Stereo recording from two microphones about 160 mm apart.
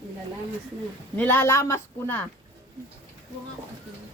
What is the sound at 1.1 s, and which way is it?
A woman's voice, 10° left (ahead or behind).